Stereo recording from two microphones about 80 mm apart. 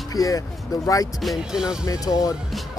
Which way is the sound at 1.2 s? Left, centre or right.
Centre.